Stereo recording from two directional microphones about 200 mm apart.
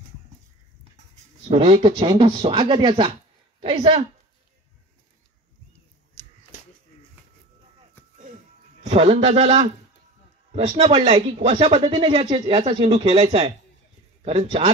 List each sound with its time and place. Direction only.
1.5 s speech: 30° right (ahead or behind)
8.8 s speech: 30° right (ahead or behind)
10.8 s speech: 30° right (ahead or behind)